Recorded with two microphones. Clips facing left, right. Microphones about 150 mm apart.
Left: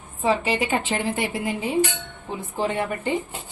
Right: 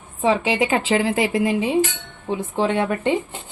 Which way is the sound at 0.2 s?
90° right.